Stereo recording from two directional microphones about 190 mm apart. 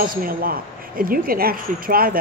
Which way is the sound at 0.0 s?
50° right (ahead or behind).